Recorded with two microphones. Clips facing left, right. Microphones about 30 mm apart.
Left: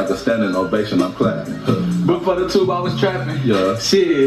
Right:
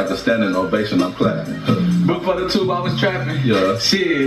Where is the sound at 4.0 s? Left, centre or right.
Right.